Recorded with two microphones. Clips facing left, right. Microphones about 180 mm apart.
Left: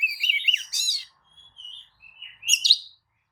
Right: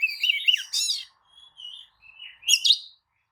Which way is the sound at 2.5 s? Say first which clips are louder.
Even; 5° left (ahead or behind).